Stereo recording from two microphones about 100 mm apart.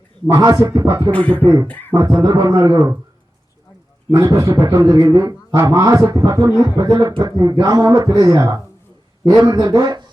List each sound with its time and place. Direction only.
0.3 s speech: 35° right (ahead or behind)
1.1 s beatboxing: 15° left (ahead or behind)
1.9 s speech: 35° right (ahead or behind)
4.3 s speech: 35° right (ahead or behind)
6.5 s speech: 40° left (ahead or behind)
6.7 s speech: 40° right (ahead or behind)